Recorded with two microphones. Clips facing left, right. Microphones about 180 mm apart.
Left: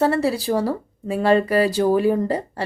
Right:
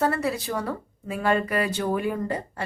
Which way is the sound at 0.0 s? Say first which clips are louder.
Left 6 dB; 30° left (ahead or behind).